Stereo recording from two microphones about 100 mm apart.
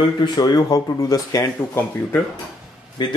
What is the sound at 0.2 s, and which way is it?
Speech, 45° left (ahead or behind).